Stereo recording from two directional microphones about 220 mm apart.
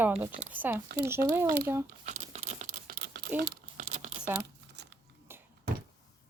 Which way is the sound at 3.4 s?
45° right (ahead or behind).